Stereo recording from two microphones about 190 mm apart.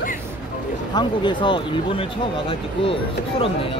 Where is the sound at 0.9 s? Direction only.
25° left (ahead or behind).